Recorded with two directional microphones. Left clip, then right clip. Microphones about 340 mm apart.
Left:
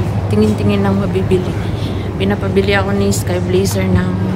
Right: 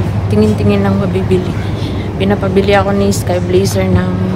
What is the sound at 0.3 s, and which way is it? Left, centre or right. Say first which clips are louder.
Speech: right 3 dB; centre.